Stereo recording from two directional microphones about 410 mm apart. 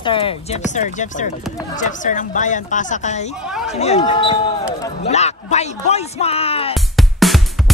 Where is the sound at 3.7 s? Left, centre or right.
Centre.